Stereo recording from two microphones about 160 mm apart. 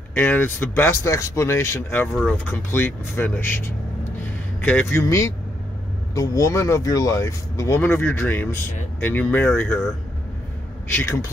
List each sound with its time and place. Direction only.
0.1 s speech: 10° left (ahead or behind)
10.9 s speech: 15° left (ahead or behind)